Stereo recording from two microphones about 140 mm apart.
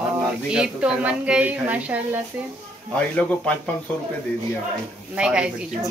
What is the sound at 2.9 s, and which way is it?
Speech, 10° left (ahead or behind).